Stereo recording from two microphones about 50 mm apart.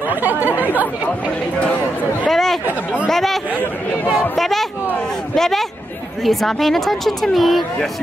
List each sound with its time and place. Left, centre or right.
0.1 s speech: right
2.2 s chatter: centre
3.1 s speech: centre
5.3 s a sound: centre
6.2 s speech: centre